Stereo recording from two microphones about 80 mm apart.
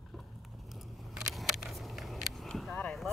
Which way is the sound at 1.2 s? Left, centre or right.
Centre.